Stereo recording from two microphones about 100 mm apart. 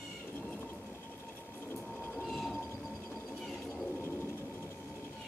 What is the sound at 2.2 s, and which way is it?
Whale vocalization, 5° left (ahead or behind).